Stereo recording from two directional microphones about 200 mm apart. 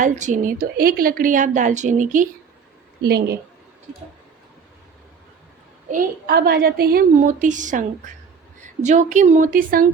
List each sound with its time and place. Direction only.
0.0 s a woman's voice: 40° right (ahead or behind)
3.0 s a woman's voice: 55° right (ahead or behind)
5.9 s a woman's voice: 45° right (ahead or behind)